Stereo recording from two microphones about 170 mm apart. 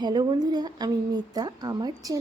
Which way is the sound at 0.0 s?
25° right (ahead or behind).